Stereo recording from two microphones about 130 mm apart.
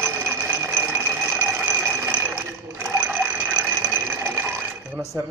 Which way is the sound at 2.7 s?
15° right (ahead or behind).